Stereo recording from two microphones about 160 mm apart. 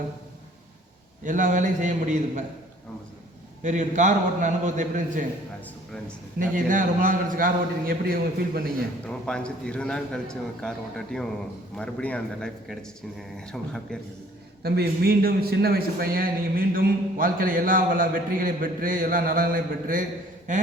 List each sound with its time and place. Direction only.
1.2 s a man's voice: 55° right (ahead or behind)
3.6 s a man's voice: 50° right (ahead or behind)
6.4 s a man's voice: 55° right (ahead or behind)
8.6 s a man's voice: 5° left (ahead or behind)
14.6 s a man's voice: 75° right (ahead or behind); by 20.6 s 50° right (ahead or behind)